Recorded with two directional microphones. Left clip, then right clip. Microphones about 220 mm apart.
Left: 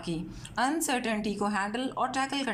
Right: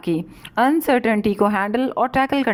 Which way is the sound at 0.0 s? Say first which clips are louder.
Right 13 dB; 35° right (ahead or behind).